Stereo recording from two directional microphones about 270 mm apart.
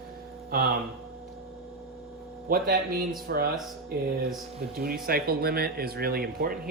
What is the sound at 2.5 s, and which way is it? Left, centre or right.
Speech, right.